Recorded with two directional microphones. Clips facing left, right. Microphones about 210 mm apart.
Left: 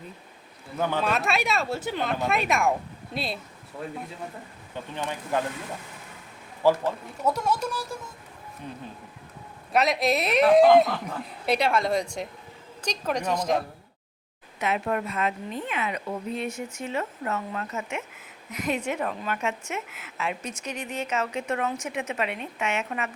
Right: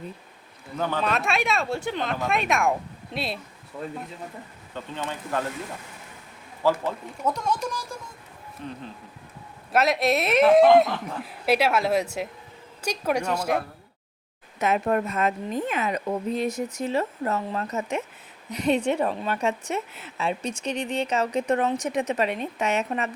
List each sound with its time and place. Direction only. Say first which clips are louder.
0.8 s speech: even; 10° left (ahead or behind)
4.7 s speech: even; 15° left (ahead or behind)
6.6 s speech: left 2 dB; 15° left (ahead or behind)
9.7 s a woman's voice: right 1 dB; centre (ahead or behind)
14.6 s a woman's voice: right 4 dB; 45° right (ahead or behind)